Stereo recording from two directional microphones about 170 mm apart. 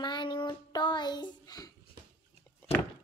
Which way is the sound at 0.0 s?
25° left (ahead or behind).